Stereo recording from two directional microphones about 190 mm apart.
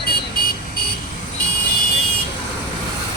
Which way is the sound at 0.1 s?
50° left (ahead or behind).